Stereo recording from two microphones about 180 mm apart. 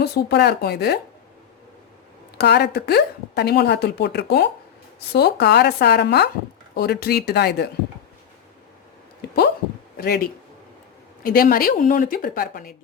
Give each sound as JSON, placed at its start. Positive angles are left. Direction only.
{"t": 0.0, "sound": "a woman's voice", "side_deg": 65}
{"t": 2.4, "sound": "a woman's voice", "side_deg": 65}
{"t": 6.7, "sound": "a woman's voice", "side_deg": 60}
{"t": 10.0, "sound": "a woman's voice", "side_deg": 60}